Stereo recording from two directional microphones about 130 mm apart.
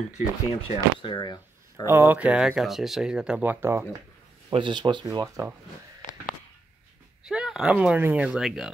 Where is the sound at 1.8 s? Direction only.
15° right (ahead or behind).